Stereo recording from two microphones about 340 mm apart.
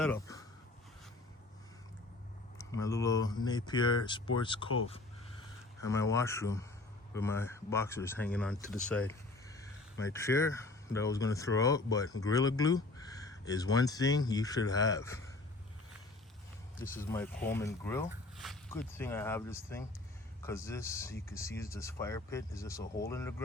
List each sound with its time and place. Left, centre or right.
0.0 s a sound: centre
2.6 s speech: centre
5.8 s speech: centre
16.7 s speech: left
17.0 s speech: centre